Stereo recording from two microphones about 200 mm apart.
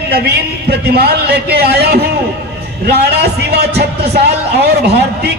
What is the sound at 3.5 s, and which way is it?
Speech, 55° right (ahead or behind).